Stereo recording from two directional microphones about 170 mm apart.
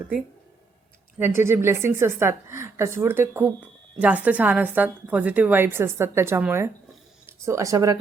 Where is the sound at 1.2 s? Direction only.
15° right (ahead or behind).